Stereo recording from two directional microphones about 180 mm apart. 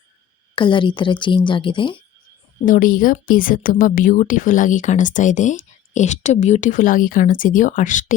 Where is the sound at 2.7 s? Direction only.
50° left (ahead or behind).